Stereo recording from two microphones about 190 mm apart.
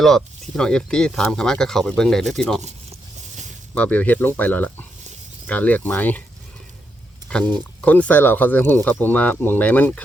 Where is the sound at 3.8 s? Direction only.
10° left (ahead or behind).